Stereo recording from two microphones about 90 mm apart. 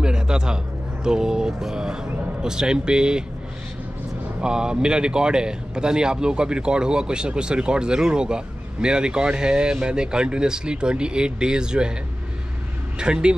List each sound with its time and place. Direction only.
0.0 s a sound: 10° right (ahead or behind)
1.0 s a man's voice: 10° right (ahead or behind)
4.4 s a man's voice: 10° right (ahead or behind)
13.0 s a man's voice: 10° right (ahead or behind)